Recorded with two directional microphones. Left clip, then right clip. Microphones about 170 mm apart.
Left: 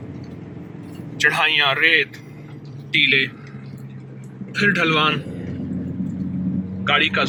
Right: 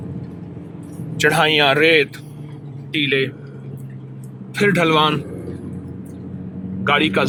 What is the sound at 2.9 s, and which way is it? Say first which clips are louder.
Speech: left 3 dB; 50° right (ahead or behind).